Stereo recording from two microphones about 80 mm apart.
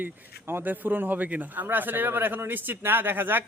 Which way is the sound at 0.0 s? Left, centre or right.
Right.